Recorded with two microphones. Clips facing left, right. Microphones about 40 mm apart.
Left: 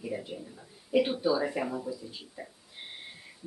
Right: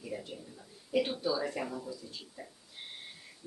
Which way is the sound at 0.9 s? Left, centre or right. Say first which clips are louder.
Left 5 dB; centre.